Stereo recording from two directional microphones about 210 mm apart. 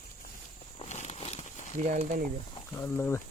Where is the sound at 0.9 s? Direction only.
30° left (ahead or behind).